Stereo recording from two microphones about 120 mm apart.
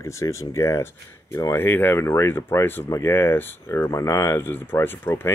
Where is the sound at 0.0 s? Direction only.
25° left (ahead or behind).